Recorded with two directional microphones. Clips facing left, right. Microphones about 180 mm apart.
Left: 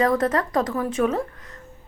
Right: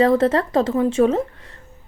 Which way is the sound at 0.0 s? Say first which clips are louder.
Right 5 dB; 25° right (ahead or behind).